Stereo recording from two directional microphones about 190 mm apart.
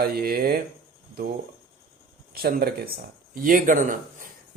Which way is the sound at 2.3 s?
55° right (ahead or behind).